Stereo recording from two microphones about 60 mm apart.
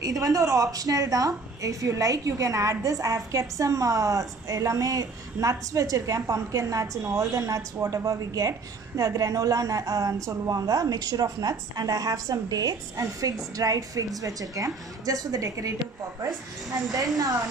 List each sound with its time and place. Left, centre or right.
0.0 s a woman's voice: right
17.2 s a woman's voice: right